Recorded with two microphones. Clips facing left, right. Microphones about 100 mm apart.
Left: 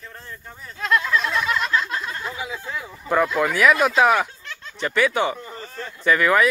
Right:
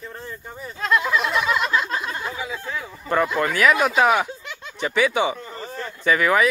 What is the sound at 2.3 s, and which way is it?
Speech, 5° left (ahead or behind).